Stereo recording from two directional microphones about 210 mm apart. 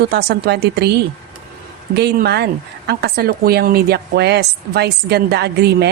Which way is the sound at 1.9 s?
50° right (ahead or behind).